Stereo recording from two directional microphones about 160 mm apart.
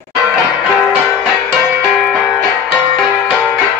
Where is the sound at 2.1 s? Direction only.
5° left (ahead or behind).